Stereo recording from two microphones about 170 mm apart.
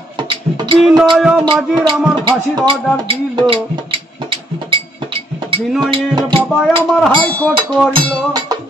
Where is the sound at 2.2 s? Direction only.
30° right (ahead or behind).